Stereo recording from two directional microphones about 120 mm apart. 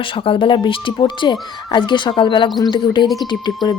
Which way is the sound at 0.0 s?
45° left (ahead or behind).